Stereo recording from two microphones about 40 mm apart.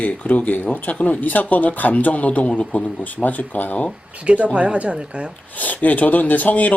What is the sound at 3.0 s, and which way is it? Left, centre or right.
Speech, left.